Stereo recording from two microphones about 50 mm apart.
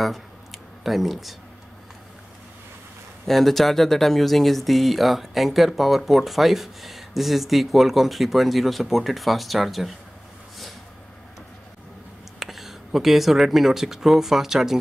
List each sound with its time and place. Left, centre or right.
0.0 s a sound: centre
3.3 s speech: centre
12.4 s speech: centre